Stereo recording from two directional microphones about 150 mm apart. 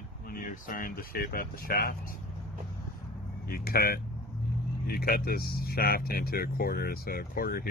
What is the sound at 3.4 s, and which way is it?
Speech, 90° left.